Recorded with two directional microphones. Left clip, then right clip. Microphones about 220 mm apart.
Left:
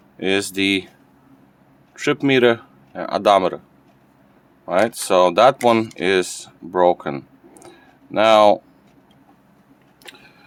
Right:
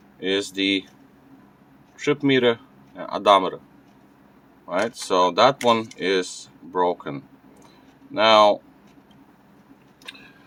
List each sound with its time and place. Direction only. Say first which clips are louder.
0.2 s speech: left 4 dB; 55° left (ahead or behind)
2.0 s speech: left 4 dB; 55° left (ahead or behind)
4.6 s speech: left 6 dB; 55° left (ahead or behind)